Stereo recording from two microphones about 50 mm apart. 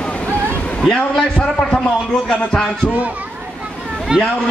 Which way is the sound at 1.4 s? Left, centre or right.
Left.